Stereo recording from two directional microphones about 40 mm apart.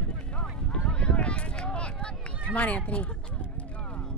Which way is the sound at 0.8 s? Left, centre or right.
Left.